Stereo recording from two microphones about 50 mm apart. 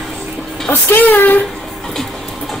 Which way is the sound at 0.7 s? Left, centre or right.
Left.